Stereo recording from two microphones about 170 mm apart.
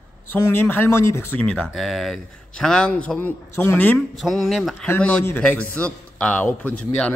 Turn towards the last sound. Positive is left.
turn(degrees=10)  # may be behind; listen again after turning